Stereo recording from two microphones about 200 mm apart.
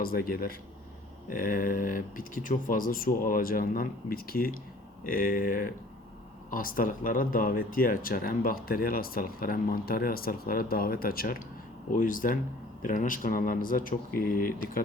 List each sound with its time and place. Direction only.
0.0 s speech: 50° left (ahead or behind)